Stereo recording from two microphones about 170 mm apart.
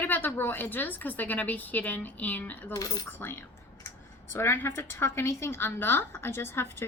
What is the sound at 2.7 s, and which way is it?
A woman's voice, 20° left (ahead or behind).